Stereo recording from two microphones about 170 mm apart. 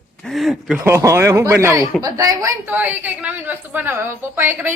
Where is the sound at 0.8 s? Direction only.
15° right (ahead or behind).